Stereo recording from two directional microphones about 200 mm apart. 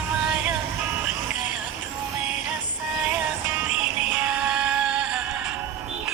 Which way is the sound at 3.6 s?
5° right (ahead or behind).